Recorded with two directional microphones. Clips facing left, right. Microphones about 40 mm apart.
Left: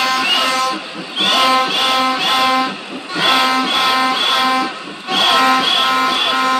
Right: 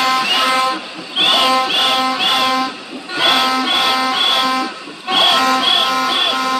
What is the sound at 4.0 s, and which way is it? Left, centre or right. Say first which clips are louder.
Music: left 1 dB; left.